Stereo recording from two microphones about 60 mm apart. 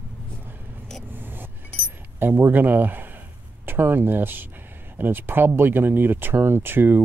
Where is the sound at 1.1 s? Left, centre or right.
Right.